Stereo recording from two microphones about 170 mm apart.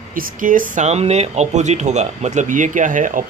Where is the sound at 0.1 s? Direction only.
55° right (ahead or behind).